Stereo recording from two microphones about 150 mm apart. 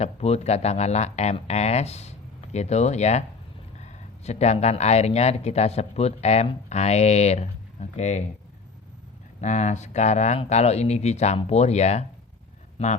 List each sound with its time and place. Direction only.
0.0 s speech: 45° left (ahead or behind)
9.4 s speech: 55° left (ahead or behind)